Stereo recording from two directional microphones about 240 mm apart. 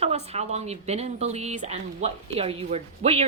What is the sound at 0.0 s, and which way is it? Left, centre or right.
Speech, right.